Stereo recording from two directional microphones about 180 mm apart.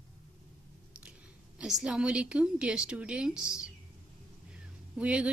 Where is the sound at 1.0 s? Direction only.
5° right (ahead or behind).